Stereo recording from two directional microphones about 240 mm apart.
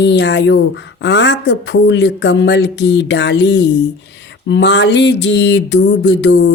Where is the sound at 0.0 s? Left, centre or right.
Left.